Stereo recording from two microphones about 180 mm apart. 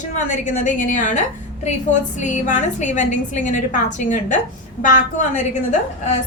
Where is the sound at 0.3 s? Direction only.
45° left (ahead or behind).